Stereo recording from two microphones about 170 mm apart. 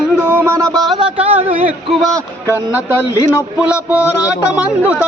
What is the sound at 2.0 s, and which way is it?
Speech, 20° right (ahead or behind).